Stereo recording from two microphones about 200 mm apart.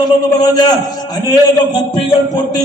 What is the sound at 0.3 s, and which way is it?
A man's voice, 20° left (ahead or behind).